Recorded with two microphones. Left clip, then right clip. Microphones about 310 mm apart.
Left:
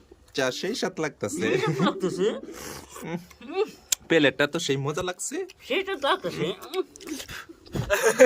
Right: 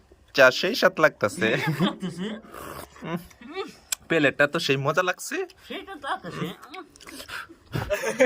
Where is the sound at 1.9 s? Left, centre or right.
Centre.